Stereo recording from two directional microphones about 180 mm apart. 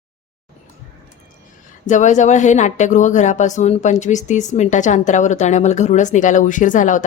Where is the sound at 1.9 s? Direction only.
40° left (ahead or behind).